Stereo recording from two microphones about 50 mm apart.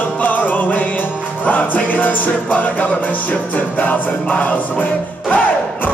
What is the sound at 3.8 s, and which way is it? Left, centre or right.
Music, left.